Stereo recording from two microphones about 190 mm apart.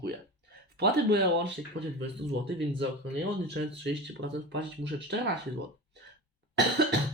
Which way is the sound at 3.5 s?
65° right (ahead or behind).